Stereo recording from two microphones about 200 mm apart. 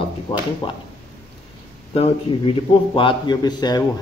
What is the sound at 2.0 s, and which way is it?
Speech, 25° left (ahead or behind).